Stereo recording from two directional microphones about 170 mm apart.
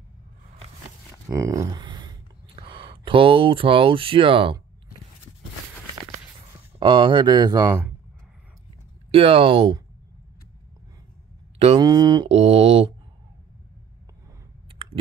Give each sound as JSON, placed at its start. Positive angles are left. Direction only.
{"t": 1.3, "sound": "speech", "side_deg": -20}
{"t": 6.8, "sound": "speech", "side_deg": -30}
{"t": 9.1, "sound": "speech", "side_deg": -35}
{"t": 11.5, "sound": "mantra", "side_deg": -35}
{"t": 11.8, "sound": "speech", "side_deg": -25}
{"t": 12.3, "sound": "speech", "side_deg": -35}